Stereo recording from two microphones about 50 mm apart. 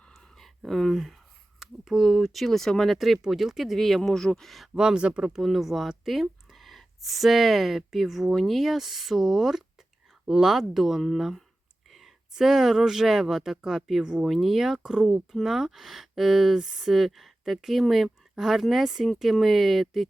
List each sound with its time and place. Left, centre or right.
0.1 s a sound: centre
1.5 s speech: centre
3.2 s speech: centre
4.8 s speech: centre
5.4 s speech: centre
11.9 s a sound: centre
12.3 s speech: centre